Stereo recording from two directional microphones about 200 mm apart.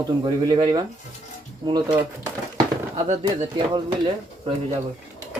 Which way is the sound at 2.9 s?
35° right (ahead or behind).